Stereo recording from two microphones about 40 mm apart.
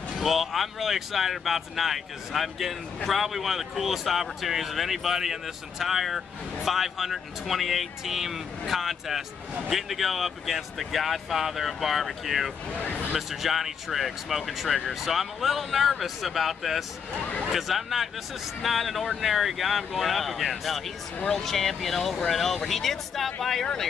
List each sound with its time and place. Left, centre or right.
0.2 s speech: centre
12.7 s speech: left
13.3 s speech: centre